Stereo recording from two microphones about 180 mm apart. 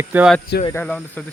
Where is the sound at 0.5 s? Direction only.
70° left (ahead or behind).